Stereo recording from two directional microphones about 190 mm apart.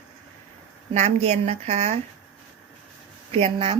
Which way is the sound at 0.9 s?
35° right (ahead or behind).